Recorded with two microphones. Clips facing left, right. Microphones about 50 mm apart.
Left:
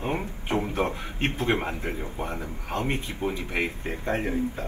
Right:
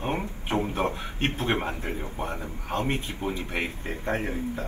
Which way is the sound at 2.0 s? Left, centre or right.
Right.